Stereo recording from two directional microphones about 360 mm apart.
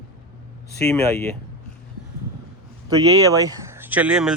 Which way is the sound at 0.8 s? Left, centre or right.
Centre.